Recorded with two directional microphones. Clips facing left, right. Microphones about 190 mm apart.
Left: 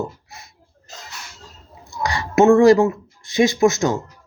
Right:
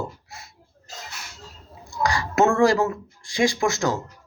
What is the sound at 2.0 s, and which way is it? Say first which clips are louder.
Speech: left 6 dB; 20° left (ahead or behind).